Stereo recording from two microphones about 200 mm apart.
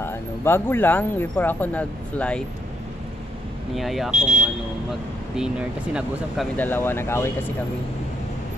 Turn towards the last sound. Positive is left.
turn(degrees=10)  # may be behind; listen again after turning